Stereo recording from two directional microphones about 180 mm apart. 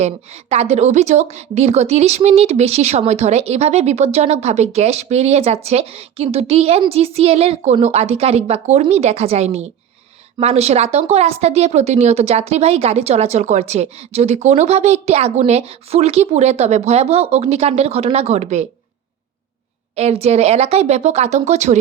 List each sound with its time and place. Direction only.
0.5 s speech: 35° right (ahead or behind)
20.0 s speech: 35° right (ahead or behind)